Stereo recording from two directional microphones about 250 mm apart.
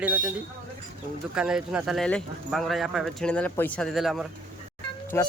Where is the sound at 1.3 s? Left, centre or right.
Centre.